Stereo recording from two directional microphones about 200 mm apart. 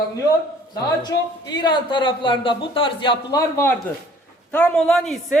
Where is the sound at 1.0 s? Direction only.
20° left (ahead or behind).